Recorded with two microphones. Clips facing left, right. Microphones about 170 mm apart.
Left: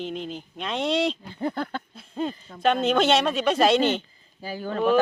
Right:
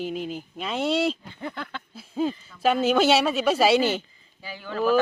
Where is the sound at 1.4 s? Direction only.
40° left (ahead or behind).